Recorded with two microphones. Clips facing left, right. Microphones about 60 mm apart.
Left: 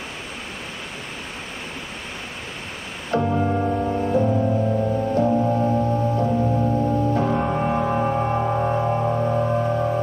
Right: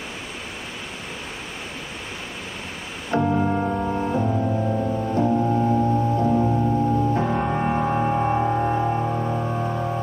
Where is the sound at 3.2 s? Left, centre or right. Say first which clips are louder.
Even; centre.